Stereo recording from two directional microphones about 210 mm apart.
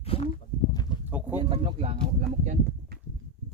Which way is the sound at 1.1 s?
10° right (ahead or behind).